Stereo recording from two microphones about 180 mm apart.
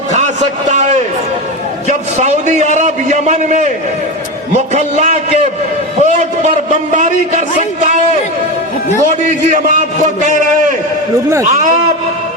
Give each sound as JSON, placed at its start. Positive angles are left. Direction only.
{"t": 0.7, "sound": "a sound", "side_deg": -40}
{"t": 1.9, "sound": "a man's voice", "side_deg": -40}
{"t": 9.5, "sound": "a man's voice", "side_deg": -45}
{"t": 11.4, "sound": "a man's voice", "side_deg": -40}